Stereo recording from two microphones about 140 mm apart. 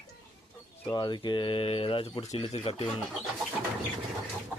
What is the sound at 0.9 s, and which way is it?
Speech, 30° left (ahead or behind).